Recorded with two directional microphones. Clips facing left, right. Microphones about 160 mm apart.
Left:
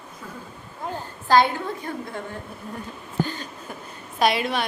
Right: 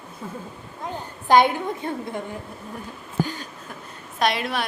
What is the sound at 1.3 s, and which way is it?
Speech, 20° right (ahead or behind).